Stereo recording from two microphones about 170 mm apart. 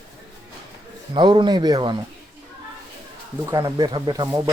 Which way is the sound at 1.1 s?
25° right (ahead or behind).